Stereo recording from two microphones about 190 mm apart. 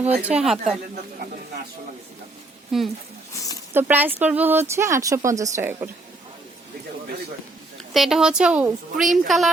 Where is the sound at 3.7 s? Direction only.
10° right (ahead or behind).